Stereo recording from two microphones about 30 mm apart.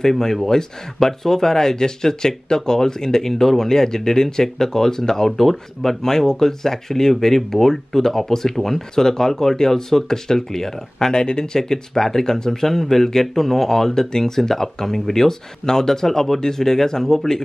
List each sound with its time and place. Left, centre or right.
0.0 s speech: centre